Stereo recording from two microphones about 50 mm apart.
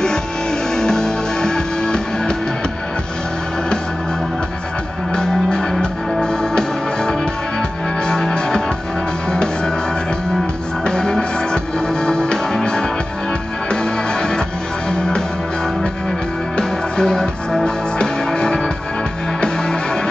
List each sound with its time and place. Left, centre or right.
0.7 s music: centre
5.1 s music: centre
10.8 s music: centre
16.5 s music: centre